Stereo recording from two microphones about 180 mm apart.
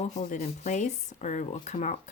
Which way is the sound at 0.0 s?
40° left (ahead or behind).